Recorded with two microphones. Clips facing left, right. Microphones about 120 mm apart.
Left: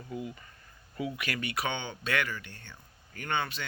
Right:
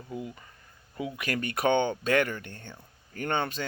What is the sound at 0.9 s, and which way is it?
Speech, 25° right (ahead or behind).